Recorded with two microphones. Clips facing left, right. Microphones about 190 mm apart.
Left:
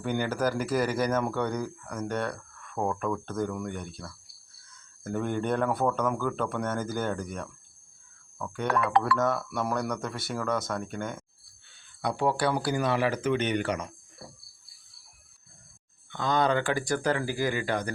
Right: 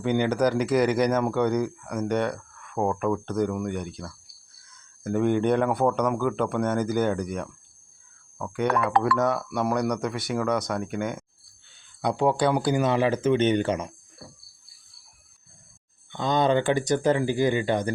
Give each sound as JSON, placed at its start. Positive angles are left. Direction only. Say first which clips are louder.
{"t": 0.1, "sound": "speech", "louder": "right 5 dB", "side_deg": -20}
{"t": 5.0, "sound": "speech", "louder": "right 7 dB", "side_deg": -20}
{"t": 8.4, "sound": "speech", "louder": "right 5 dB", "side_deg": -15}
{"t": 8.6, "sound": "speech", "louder": "right 3 dB", "side_deg": -65}
{"t": 9.1, "sound": "speech", "louder": "right 3 dB", "side_deg": -15}
{"t": 16.1, "sound": "speech", "louder": "right 3 dB", "side_deg": -20}